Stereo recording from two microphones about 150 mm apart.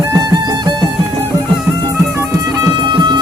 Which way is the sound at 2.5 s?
30° right (ahead or behind).